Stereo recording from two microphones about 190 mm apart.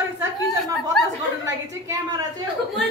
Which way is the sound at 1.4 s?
15° right (ahead or behind).